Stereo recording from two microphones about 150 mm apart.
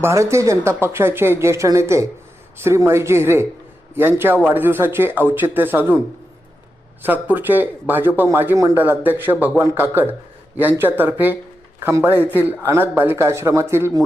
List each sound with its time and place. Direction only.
0.0 s speech: 20° right (ahead or behind)
7.0 s speech: 10° right (ahead or behind)